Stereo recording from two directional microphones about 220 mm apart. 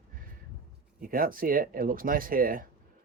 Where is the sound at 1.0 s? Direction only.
40° right (ahead or behind).